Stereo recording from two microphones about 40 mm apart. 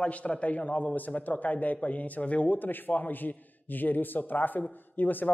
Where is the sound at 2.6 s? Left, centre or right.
Left.